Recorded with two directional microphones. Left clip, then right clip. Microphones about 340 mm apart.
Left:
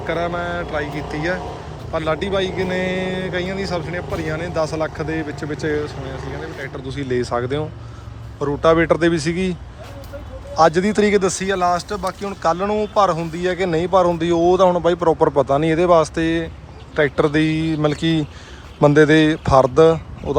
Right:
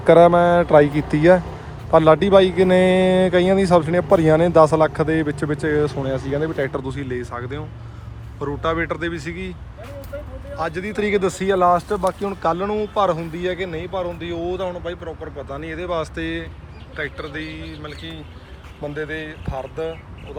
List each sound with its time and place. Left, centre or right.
0.0 s speech: centre
19.5 s speech: left